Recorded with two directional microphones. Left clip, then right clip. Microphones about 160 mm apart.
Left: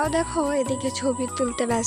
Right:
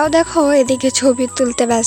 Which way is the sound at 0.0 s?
45° right (ahead or behind).